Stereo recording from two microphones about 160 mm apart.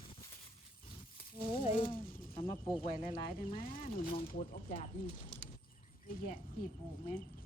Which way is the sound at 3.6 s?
60° left (ahead or behind).